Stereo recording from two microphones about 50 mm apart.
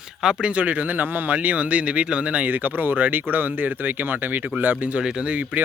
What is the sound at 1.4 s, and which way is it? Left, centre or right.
Speech, right.